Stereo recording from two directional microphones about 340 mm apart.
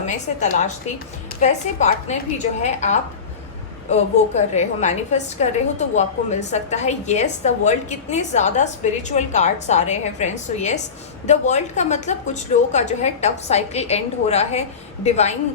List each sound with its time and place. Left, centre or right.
0.0 s a woman's voice: left
6.5 s a woman's voice: centre